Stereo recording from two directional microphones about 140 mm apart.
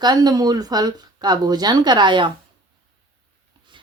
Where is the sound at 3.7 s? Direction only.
35° right (ahead or behind).